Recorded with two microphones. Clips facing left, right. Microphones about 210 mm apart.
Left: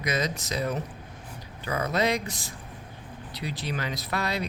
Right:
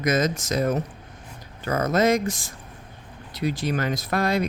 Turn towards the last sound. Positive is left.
turn(degrees=-50)  # may be behind; listen again after turning